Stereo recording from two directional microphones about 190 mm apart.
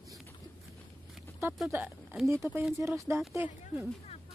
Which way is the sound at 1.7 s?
10° right (ahead or behind).